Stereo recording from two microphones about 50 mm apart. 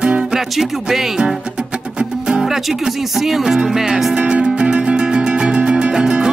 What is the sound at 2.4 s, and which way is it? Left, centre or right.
Speech, centre.